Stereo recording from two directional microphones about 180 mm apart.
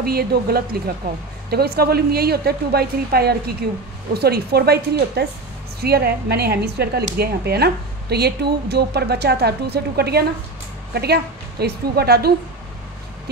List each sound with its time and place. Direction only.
0.0 s a woman's voice: 60° right (ahead or behind)